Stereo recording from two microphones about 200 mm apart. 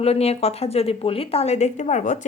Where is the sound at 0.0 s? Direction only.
30° left (ahead or behind).